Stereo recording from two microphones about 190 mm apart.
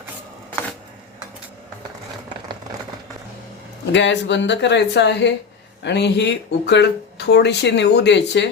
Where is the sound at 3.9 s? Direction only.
70° left (ahead or behind).